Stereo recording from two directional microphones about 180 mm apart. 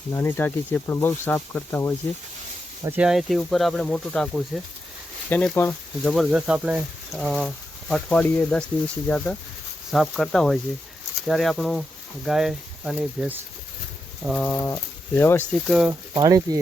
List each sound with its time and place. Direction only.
0.1 s speech: 10° left (ahead or behind)
2.8 s speech: 10° right (ahead or behind)
14.3 s speech: 5° left (ahead or behind)
15.6 s speech: centre (ahead or behind)
16.1 s speech: 20° right (ahead or behind)